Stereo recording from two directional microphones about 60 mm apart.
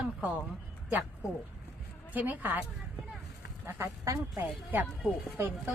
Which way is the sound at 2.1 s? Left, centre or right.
Right.